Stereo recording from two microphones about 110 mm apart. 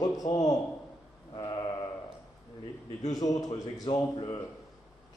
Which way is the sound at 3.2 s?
35° left (ahead or behind).